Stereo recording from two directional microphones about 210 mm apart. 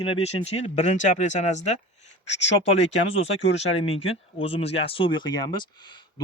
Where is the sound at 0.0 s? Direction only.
30° left (ahead or behind).